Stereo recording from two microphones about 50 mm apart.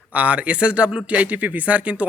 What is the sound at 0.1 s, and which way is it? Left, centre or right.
Speech, right.